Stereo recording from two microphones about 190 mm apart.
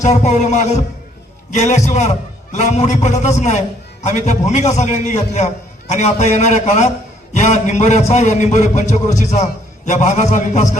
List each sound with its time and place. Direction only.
0.0 s a man's voice: 35° left (ahead or behind)